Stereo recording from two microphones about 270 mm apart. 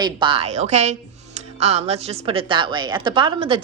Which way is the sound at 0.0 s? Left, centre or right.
Centre.